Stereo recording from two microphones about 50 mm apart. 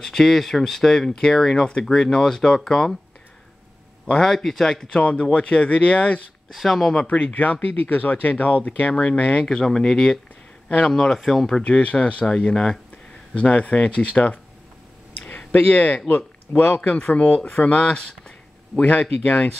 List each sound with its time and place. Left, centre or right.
0.0 s speech: centre
4.1 s speech: centre
5.3 s speech: left
6.5 s speech: centre
7.0 s speech: left
9.5 s speech: centre
11.6 s speech: left
15.1 s a sound: left
16.1 s speech: left
17.7 s speech: left